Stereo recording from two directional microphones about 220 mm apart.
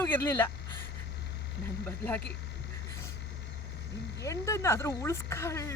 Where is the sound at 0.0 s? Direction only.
10° left (ahead or behind).